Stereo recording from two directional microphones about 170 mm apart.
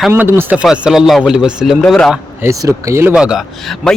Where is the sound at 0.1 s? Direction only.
15° right (ahead or behind).